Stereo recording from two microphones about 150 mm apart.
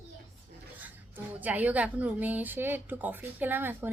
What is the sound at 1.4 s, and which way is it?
Speech, 10° right (ahead or behind).